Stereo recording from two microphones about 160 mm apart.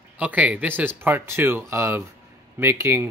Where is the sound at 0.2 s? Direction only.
10° right (ahead or behind).